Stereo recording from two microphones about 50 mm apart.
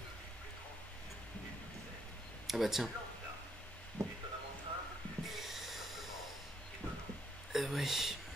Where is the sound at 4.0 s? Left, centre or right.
Right.